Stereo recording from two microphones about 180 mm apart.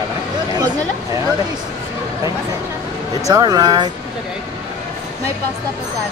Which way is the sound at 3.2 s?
20° right (ahead or behind).